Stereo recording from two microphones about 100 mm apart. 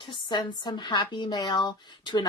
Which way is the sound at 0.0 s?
50° left (ahead or behind).